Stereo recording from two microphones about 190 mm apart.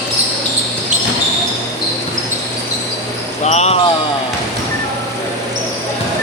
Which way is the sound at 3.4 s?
35° left (ahead or behind).